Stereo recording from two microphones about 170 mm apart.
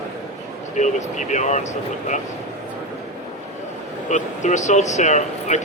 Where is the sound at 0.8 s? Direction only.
45° left (ahead or behind).